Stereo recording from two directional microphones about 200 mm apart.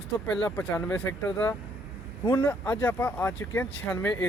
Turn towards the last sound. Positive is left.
turn(degrees=10)  # may be behind; listen again after turning